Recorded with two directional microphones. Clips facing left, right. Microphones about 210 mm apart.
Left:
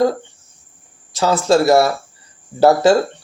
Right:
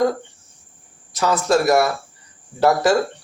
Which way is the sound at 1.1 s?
30° left (ahead or behind).